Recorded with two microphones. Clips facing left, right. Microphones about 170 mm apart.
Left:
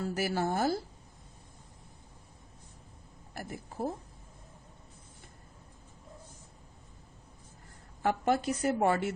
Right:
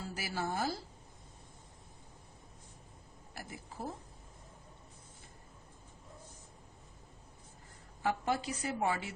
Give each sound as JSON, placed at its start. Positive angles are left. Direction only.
{"t": 0.0, "sound": "a woman's voice", "side_deg": 55}
{"t": 3.3, "sound": "speech", "side_deg": 50}
{"t": 8.0, "sound": "a woman's voice", "side_deg": 55}